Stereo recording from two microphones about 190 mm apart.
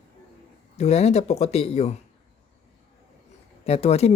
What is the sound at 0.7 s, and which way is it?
Speech, 35° left (ahead or behind).